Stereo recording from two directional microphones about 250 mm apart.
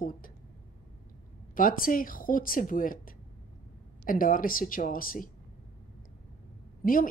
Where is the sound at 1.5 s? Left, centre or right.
Left.